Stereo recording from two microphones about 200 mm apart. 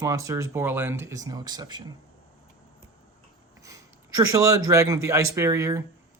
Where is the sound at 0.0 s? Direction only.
15° right (ahead or behind).